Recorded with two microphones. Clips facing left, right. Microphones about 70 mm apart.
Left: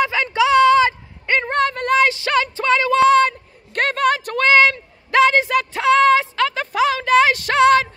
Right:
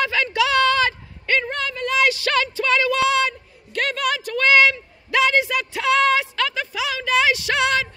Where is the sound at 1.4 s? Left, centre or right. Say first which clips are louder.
Left 7 dB; left.